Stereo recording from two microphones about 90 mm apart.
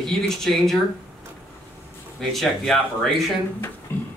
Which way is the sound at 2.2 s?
Centre (ahead or behind).